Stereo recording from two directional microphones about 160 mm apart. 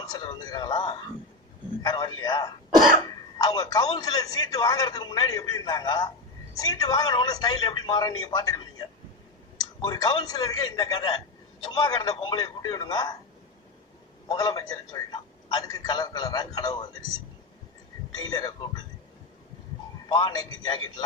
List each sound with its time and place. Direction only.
0.0 s speech: 25° left (ahead or behind)
14.3 s speech: 25° left (ahead or behind)
18.2 s speech: 25° left (ahead or behind)
20.1 s speech: 25° left (ahead or behind)